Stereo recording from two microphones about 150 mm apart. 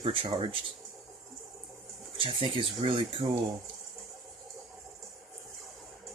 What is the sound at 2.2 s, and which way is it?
Speech, 35° right (ahead or behind).